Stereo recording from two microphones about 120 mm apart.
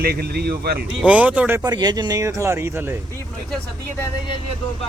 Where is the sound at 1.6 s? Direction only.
35° right (ahead or behind).